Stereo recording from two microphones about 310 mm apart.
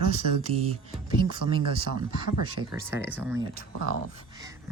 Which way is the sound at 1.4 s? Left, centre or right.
Right.